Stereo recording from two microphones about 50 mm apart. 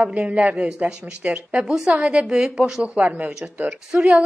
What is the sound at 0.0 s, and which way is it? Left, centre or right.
Speech, right.